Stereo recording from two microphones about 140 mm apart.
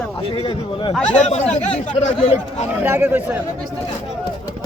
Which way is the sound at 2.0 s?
55° left (ahead or behind).